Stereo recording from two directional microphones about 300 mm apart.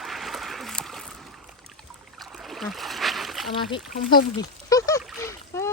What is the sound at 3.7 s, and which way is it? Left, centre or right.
Speech, centre.